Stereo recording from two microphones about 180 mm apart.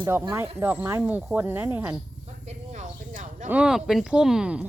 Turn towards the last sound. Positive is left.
turn(degrees=-5)  # may be behind; listen again after turning